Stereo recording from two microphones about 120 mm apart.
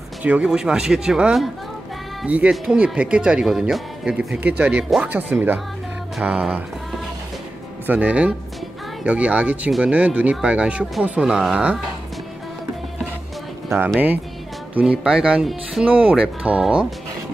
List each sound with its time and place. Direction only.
0.2 s speech: 10° right (ahead or behind)
7.8 s speech: 15° right (ahead or behind)
13.9 s speech: 15° right (ahead or behind)